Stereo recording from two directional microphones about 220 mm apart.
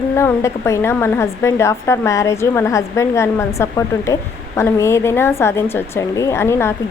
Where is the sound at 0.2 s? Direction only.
10° left (ahead or behind).